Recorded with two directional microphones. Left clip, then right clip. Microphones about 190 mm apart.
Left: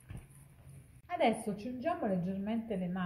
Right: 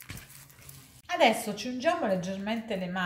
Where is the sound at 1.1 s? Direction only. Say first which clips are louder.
Right 7 dB; 15° left (ahead or behind).